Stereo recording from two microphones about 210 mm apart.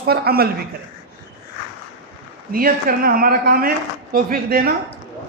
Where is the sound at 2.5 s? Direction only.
45° right (ahead or behind).